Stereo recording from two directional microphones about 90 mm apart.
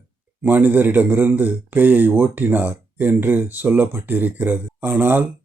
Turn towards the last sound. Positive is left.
turn(degrees=-20)  # may be behind; listen again after turning